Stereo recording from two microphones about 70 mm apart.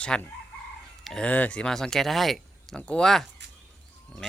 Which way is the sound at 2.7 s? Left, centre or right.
Centre.